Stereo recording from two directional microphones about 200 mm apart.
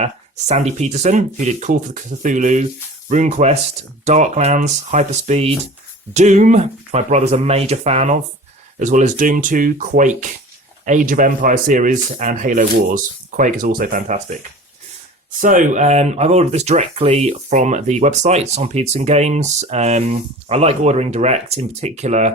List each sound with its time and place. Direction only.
0.0 s speech: 35° right (ahead or behind)
15.4 s speech: 40° right (ahead or behind)